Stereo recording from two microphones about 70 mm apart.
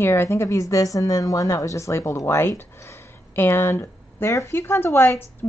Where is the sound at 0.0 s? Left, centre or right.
Left.